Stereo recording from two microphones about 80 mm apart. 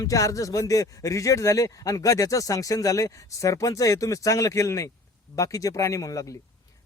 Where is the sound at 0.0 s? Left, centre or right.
Left.